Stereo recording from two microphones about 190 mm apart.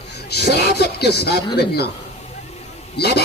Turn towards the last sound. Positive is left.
turn(degrees=60)  # may be behind; listen again after turning